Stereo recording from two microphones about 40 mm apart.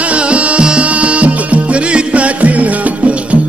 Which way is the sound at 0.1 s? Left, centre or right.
Right.